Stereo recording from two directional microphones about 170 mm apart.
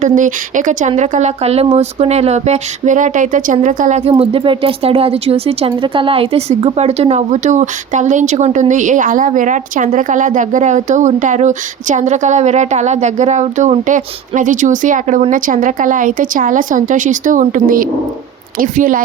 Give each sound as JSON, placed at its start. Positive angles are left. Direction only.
{"t": 0.0, "sound": "speech", "side_deg": -50}
{"t": 4.1, "sound": "speech", "side_deg": -30}